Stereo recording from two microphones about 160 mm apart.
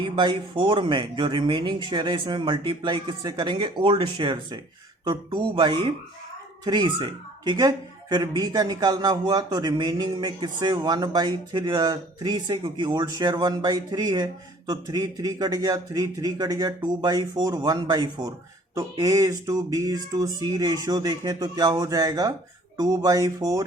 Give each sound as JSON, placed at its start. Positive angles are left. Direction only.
{"t": 0.0, "sound": "a man's voice", "side_deg": -30}